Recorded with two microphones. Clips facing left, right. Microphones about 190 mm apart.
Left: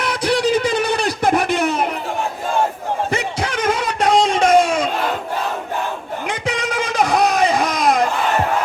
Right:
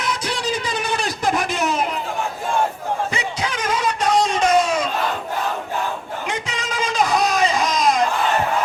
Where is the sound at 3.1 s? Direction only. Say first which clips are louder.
Left 4 dB; 55° left (ahead or behind).